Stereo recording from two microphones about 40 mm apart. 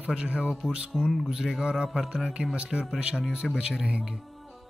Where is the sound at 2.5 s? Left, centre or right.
Right.